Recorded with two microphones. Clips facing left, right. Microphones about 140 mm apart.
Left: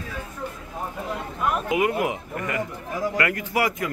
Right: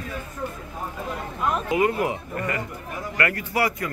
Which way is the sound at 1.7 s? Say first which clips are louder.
Right 1 dB; 15° left (ahead or behind).